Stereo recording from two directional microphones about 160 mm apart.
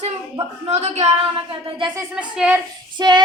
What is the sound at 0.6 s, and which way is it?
A woman's voice, 45° right (ahead or behind).